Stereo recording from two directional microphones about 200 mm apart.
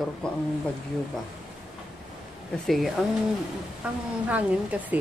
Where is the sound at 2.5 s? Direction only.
Centre (ahead or behind).